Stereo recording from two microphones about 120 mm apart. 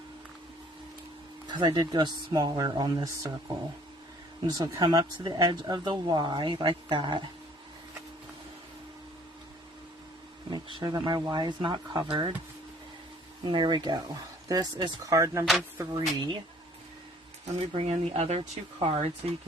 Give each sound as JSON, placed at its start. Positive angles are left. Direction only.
{"t": 1.5, "sound": "speech", "side_deg": -35}
{"t": 4.4, "sound": "speech", "side_deg": -30}
{"t": 10.5, "sound": "speech", "side_deg": -40}
{"t": 13.4, "sound": "speech", "side_deg": -40}
{"t": 16.0, "sound": "speech", "side_deg": -35}
{"t": 17.4, "sound": "speech", "side_deg": -60}
{"t": 18.3, "sound": "speech", "side_deg": -45}